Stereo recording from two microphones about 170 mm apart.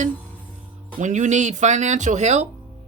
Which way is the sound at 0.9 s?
45° right (ahead or behind).